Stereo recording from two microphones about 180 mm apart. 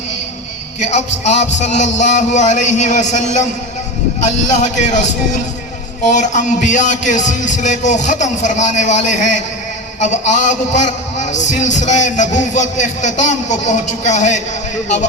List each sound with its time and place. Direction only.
0.8 s a man's voice: 40° left (ahead or behind)
6.1 s a man's voice: 45° left (ahead or behind)